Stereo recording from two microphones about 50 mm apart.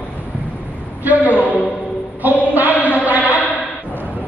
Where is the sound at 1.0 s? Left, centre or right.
Right.